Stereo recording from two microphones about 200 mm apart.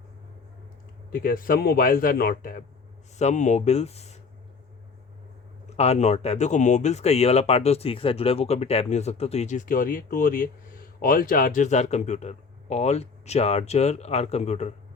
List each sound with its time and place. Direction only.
1.1 s a man's voice: 45° left (ahead or behind)
3.2 s speech: 35° left (ahead or behind)
5.6 s speech: 30° left (ahead or behind)